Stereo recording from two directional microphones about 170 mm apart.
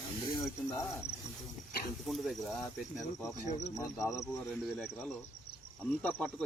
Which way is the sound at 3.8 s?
15° left (ahead or behind).